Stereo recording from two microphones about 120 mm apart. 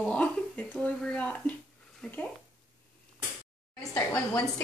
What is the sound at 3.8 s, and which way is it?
Speech, 25° left (ahead or behind).